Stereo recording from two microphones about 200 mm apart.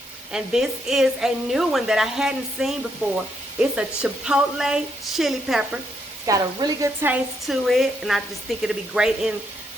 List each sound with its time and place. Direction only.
0.3 s a woman's voice: 5° right (ahead or behind)
6.2 s a woman's voice: 20° right (ahead or behind); by 9.3 s centre (ahead or behind)